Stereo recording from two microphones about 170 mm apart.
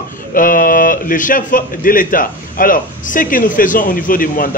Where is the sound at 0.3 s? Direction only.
55° left (ahead or behind).